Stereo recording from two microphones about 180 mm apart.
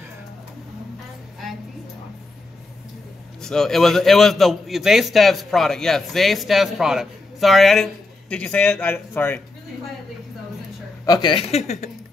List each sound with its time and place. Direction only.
3.4 s a man's voice: 5° left (ahead or behind)
11.1 s speech: 25° left (ahead or behind)